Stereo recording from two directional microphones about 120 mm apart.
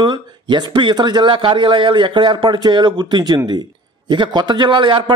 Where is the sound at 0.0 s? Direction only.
40° right (ahead or behind).